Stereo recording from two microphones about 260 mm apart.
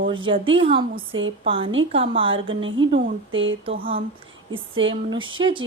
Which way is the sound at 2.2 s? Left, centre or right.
Centre.